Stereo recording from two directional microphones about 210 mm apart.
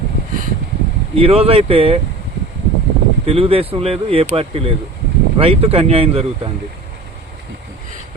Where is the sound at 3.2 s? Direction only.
25° right (ahead or behind).